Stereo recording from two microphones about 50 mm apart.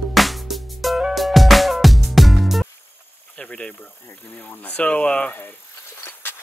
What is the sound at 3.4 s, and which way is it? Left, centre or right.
Speech, centre.